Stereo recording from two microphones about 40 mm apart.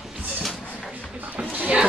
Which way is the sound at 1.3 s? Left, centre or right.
Right.